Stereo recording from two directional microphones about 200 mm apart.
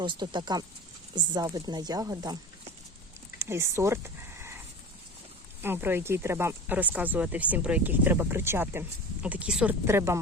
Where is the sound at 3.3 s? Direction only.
15° right (ahead or behind).